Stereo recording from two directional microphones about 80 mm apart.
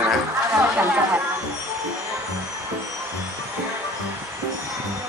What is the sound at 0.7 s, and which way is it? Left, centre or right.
Speech, centre.